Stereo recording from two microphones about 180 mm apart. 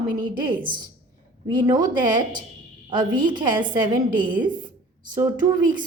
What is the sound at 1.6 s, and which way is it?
A woman's voice, 25° right (ahead or behind).